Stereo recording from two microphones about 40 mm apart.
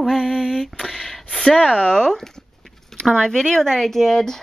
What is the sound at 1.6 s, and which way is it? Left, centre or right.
A woman's voice, centre.